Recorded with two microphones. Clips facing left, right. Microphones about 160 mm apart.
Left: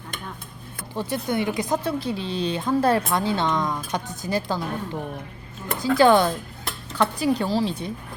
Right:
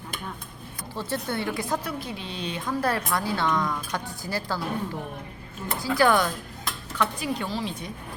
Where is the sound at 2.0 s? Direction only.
30° left (ahead or behind).